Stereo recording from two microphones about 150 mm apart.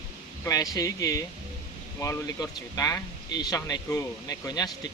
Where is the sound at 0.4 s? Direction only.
25° left (ahead or behind).